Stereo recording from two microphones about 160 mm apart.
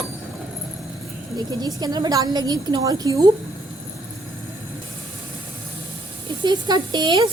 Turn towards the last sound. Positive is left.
turn(degrees=-30)  # may be behind; listen again after turning